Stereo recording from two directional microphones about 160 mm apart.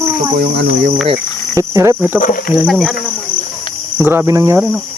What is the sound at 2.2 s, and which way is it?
Speech, 60° left (ahead or behind).